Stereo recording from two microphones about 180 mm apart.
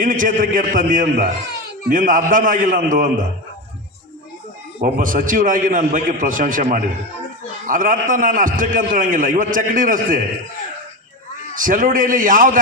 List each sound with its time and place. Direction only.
0.0 s a man's voice: 50° right (ahead or behind)
4.8 s a man's voice: 50° right (ahead or behind)
11.5 s a man's voice: 50° right (ahead or behind)